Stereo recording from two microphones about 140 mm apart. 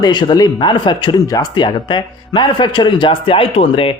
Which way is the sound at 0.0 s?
30° left (ahead or behind).